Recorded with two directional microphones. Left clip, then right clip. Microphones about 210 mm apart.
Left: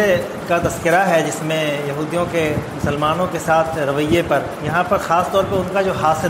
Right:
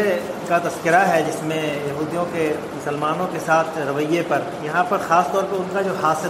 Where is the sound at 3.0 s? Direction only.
50° left (ahead or behind).